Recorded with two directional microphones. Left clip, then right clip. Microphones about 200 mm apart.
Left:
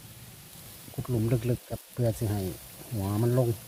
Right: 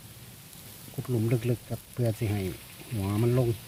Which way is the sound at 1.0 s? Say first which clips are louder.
Even; 5° left (ahead or behind).